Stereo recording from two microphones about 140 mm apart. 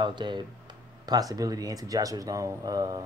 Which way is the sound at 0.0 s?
35° right (ahead or behind).